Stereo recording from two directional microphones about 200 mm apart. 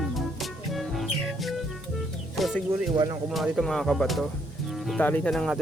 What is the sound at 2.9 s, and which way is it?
Speech, 20° right (ahead or behind).